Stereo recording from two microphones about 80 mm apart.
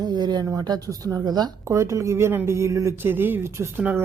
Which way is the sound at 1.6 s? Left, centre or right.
Right.